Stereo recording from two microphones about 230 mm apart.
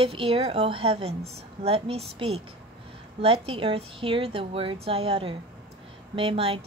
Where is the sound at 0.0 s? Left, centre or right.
Right.